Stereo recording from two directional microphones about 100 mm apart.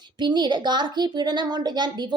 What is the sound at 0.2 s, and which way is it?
A woman's voice, 45° right (ahead or behind).